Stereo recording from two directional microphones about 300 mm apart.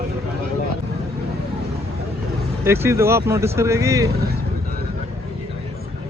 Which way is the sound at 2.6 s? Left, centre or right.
Centre.